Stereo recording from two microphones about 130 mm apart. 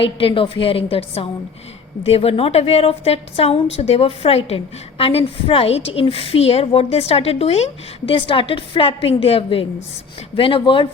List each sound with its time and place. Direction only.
0.0 s a woman's voice: 45° left (ahead or behind)